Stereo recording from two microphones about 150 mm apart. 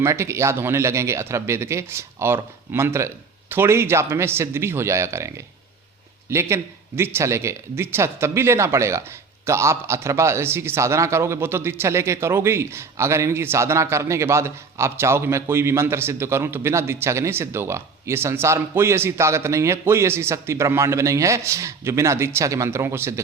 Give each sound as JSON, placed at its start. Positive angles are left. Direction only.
{"t": 0.0, "sound": "a man's voice", "side_deg": -20}
{"t": 6.3, "sound": "a man's voice", "side_deg": -15}